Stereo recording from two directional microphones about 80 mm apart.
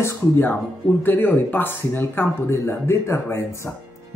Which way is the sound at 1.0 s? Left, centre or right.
Left.